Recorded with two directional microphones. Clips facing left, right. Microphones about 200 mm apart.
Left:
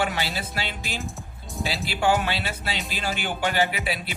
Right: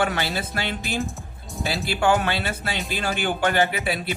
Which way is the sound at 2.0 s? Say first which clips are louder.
Right 2 dB; 50° right (ahead or behind).